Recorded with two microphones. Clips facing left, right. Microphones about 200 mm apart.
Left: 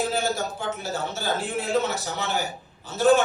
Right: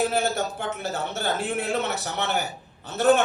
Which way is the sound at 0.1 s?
60° right (ahead or behind).